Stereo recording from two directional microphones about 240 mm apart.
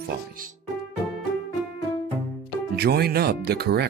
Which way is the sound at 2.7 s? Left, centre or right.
Right.